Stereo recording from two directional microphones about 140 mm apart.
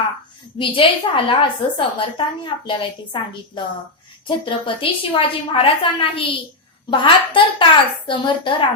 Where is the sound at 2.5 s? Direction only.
35° left (ahead or behind).